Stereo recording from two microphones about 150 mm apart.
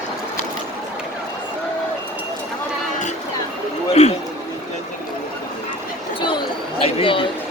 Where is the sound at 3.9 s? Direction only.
45° left (ahead or behind).